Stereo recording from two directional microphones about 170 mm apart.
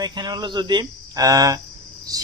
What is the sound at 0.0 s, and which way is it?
Speech, 25° right (ahead or behind).